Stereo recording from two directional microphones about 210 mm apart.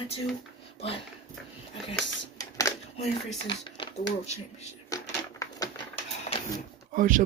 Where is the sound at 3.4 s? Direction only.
25° left (ahead or behind).